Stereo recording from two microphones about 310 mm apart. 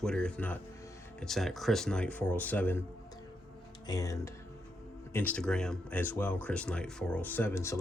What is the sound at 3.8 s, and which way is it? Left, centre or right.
Speech, centre.